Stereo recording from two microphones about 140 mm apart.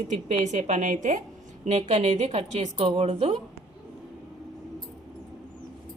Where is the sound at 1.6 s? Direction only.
55° right (ahead or behind).